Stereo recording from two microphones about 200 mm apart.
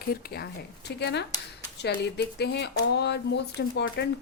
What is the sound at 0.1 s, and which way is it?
A woman's voice, 50° left (ahead or behind).